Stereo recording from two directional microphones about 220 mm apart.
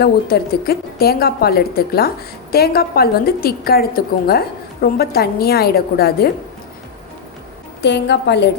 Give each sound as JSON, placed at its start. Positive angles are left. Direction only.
{"t": 0.0, "sound": "a woman's voice", "side_deg": 45}
{"t": 7.8, "sound": "a woman's voice", "side_deg": 50}